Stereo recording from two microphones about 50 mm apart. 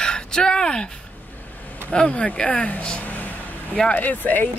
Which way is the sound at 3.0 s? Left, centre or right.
Left.